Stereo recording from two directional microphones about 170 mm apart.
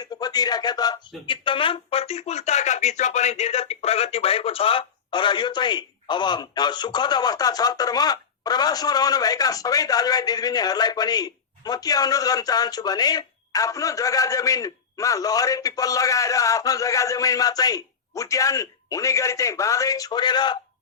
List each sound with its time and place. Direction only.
0.0 s speech: 25° left (ahead or behind)